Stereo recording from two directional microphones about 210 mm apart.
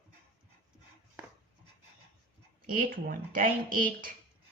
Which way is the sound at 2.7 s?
45° right (ahead or behind).